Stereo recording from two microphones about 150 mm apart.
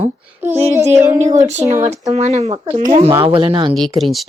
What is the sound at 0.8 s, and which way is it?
Speech, 50° right (ahead or behind).